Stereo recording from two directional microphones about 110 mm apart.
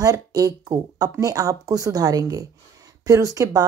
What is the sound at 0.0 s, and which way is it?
Speech, 30° right (ahead or behind).